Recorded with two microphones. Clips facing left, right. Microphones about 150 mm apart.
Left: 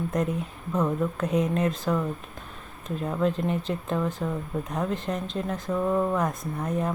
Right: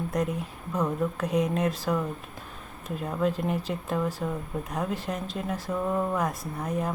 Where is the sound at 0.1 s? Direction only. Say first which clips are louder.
Left 1 dB; centre (ahead or behind).